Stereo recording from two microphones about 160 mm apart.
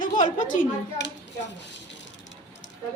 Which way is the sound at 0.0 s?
55° left (ahead or behind).